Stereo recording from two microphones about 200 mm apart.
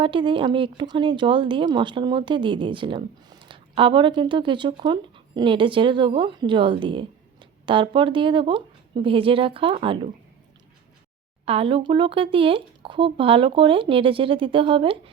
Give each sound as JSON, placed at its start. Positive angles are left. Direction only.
{"t": 0.0, "sound": "speech", "side_deg": -25}
{"t": 11.4, "sound": "speech", "side_deg": -30}